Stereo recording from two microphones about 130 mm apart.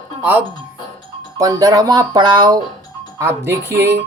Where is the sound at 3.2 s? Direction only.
20° right (ahead or behind).